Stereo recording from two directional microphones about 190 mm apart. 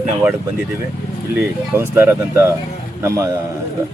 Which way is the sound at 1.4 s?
10° right (ahead or behind).